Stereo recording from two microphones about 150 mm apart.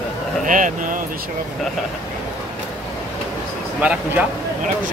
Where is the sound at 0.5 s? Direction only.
60° right (ahead or behind).